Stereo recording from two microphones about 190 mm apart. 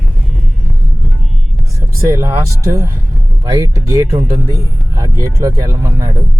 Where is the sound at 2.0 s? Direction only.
15° right (ahead or behind).